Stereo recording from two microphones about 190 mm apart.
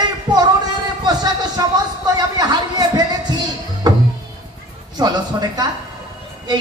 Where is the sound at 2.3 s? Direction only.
20° right (ahead or behind).